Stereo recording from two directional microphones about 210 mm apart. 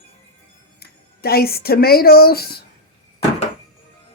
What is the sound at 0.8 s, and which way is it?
Speech, 45° left (ahead or behind).